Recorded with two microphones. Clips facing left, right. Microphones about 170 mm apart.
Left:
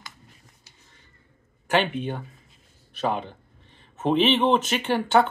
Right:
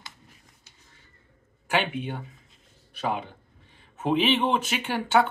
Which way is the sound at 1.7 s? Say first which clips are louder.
Left 3 dB; 10° right (ahead or behind).